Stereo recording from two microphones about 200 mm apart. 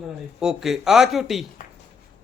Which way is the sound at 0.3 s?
Centre (ahead or behind).